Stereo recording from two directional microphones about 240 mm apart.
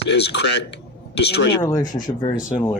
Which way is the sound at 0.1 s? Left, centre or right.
Left.